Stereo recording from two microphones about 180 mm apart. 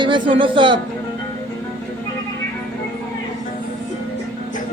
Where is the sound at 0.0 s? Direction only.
25° right (ahead or behind).